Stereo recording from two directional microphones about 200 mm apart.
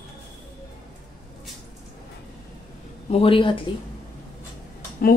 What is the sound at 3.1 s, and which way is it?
Speech, 25° left (ahead or behind).